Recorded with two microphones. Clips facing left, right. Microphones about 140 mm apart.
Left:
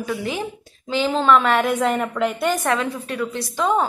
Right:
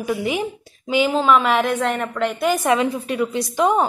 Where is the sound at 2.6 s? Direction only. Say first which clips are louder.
Right 4 dB; 15° right (ahead or behind).